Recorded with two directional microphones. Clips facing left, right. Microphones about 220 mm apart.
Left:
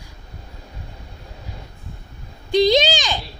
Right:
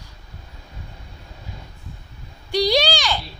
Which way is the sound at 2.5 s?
20° left (ahead or behind).